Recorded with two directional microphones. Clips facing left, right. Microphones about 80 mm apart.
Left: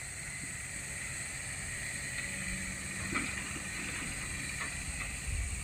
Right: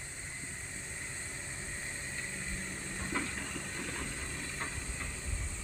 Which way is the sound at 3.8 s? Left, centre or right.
Right.